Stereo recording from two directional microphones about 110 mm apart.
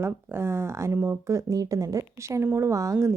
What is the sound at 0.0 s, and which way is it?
Speech, 20° right (ahead or behind).